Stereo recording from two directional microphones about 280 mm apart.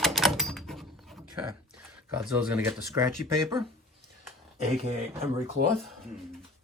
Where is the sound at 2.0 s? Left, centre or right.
Centre.